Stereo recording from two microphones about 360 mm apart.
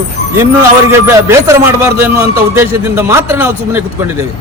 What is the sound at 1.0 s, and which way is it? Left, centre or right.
A man's voice, centre.